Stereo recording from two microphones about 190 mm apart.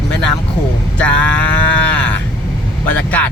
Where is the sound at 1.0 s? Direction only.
5° left (ahead or behind).